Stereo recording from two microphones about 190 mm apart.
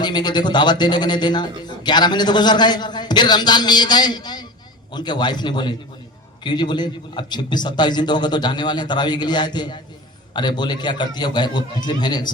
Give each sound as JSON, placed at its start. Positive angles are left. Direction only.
{"t": 0.0, "sound": "a man's voice", "side_deg": 25}